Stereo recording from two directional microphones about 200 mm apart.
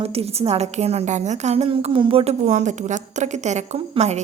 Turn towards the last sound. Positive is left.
turn(degrees=-35)  # may be behind; listen again after turning